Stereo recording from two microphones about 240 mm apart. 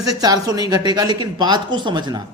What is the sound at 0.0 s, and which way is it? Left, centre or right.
A man's voice, centre.